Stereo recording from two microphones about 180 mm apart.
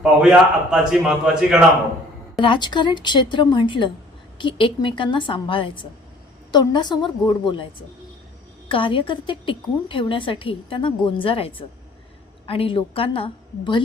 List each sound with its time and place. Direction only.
0.0 s a man's voice: 5° right (ahead or behind)
2.4 s a woman's voice: 25° left (ahead or behind)
8.7 s a woman's voice: 30° left (ahead or behind)